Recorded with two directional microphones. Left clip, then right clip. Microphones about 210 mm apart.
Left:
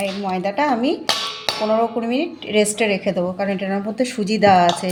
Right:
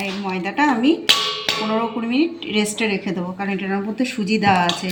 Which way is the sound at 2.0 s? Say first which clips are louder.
Right 2 dB; 40° left (ahead or behind).